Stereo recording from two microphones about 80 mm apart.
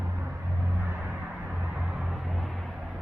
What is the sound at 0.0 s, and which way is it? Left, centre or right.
Music, right.